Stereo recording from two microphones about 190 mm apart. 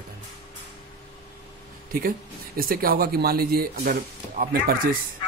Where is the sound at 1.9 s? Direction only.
50° right (ahead or behind).